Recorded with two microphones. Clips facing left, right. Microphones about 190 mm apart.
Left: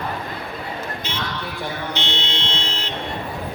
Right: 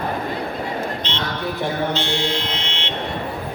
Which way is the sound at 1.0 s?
10° left (ahead or behind).